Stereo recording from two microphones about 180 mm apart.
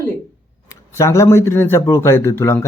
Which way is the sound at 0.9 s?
15° left (ahead or behind).